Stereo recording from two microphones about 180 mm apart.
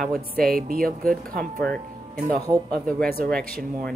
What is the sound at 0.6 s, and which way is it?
Speech, 55° right (ahead or behind).